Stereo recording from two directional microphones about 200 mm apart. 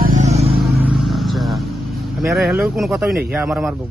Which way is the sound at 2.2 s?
Centre (ahead or behind).